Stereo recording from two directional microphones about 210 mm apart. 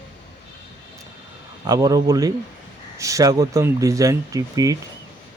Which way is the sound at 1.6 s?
20° right (ahead or behind).